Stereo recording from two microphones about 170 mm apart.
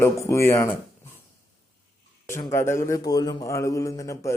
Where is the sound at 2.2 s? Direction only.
15° left (ahead or behind).